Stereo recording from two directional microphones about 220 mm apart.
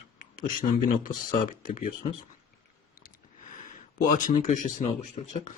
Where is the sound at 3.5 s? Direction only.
35° left (ahead or behind).